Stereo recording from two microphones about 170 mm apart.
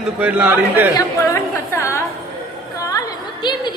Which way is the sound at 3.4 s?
25° left (ahead or behind).